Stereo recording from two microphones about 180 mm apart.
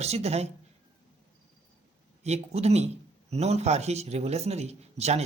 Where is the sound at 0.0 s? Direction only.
35° right (ahead or behind).